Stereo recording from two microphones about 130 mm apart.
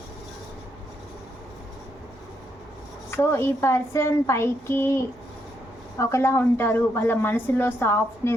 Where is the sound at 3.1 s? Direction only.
20° left (ahead or behind).